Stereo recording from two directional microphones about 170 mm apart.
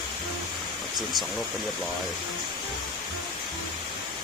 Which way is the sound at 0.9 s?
Centre (ahead or behind).